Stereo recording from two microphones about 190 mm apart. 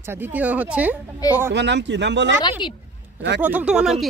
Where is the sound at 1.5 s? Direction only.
65° right (ahead or behind).